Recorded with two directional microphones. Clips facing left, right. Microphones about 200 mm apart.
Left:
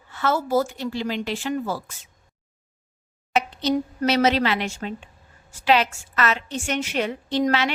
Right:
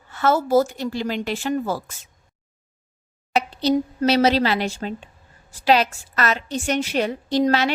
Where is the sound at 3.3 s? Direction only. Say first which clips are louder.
Right 2 dB; 35° right (ahead or behind).